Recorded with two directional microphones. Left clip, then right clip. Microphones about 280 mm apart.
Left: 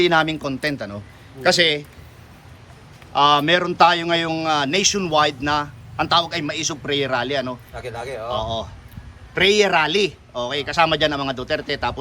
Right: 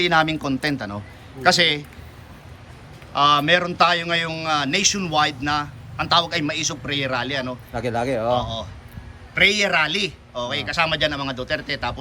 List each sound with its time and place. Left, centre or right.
0.0 s a man's voice: centre
3.1 s a man's voice: centre
7.8 s speech: right
8.4 s a man's voice: centre